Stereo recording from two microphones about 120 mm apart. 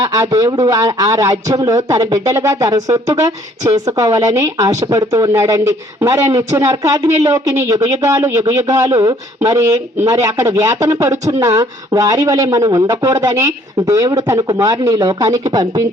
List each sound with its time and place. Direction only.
0.1 s speech: 30° right (ahead or behind)